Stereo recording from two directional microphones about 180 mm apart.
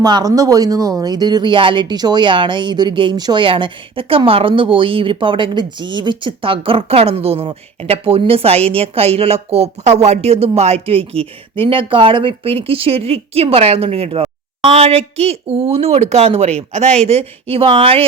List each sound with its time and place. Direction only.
0.0 s speech: 20° right (ahead or behind)